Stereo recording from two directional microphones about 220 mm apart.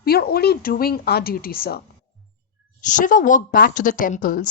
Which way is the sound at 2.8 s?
35° left (ahead or behind).